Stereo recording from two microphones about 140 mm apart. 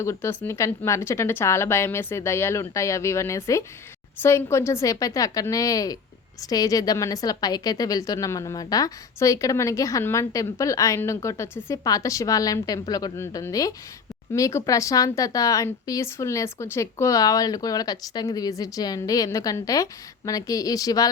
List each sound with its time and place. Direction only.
0.0 s a woman's voice: 20° left (ahead or behind)